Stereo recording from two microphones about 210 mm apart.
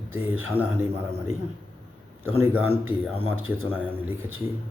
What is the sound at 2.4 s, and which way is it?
Speech, 10° right (ahead or behind).